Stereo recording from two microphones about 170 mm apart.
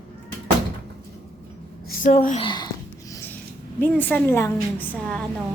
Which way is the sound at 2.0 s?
45° left (ahead or behind).